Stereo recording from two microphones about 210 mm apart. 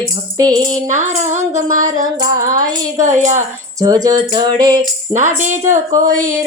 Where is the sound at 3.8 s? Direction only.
15° right (ahead or behind).